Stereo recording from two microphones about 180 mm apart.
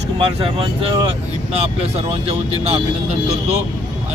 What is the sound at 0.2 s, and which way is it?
Speech, 30° right (ahead or behind).